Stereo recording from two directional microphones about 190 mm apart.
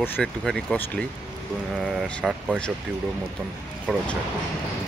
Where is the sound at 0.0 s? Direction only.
5° left (ahead or behind).